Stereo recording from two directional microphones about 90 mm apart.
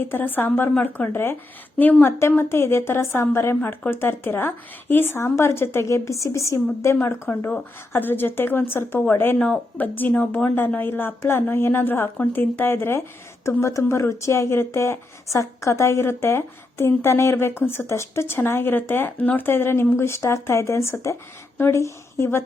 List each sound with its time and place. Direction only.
0.1 s speech: 20° left (ahead or behind)